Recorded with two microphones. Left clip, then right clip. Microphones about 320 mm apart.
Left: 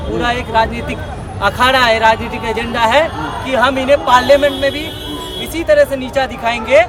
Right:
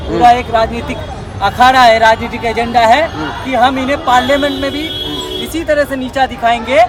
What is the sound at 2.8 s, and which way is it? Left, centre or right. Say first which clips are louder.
Speech: right 3 dB; centre.